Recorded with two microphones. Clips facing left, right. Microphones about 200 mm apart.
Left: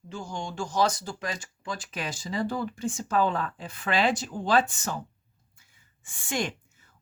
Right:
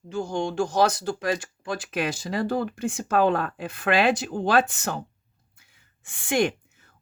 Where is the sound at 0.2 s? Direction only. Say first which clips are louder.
Right 9 dB; 65° right (ahead or behind).